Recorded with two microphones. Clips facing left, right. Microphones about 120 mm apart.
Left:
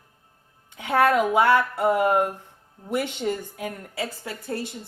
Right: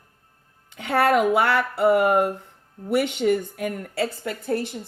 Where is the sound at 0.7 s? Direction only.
75° right (ahead or behind).